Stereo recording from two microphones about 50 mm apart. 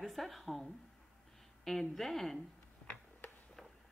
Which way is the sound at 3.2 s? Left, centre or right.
Left.